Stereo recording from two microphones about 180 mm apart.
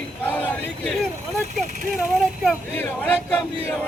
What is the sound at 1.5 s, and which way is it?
Speech, 50° right (ahead or behind).